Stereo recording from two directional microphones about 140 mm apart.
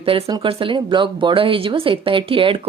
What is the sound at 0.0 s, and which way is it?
Speech, 40° right (ahead or behind).